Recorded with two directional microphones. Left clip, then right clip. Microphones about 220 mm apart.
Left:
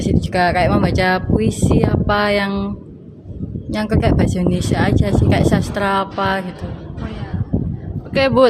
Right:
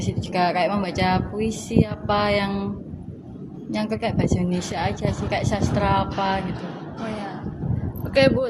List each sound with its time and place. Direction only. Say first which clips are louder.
0.0 s speech: left 6 dB; 45° left (ahead or behind)
3.7 s speech: left 7 dB; 40° left (ahead or behind)
8.1 s speech: left 1 dB; 10° left (ahead or behind)